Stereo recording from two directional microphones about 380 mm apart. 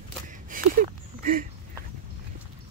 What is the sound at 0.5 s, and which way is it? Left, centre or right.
Speech, right.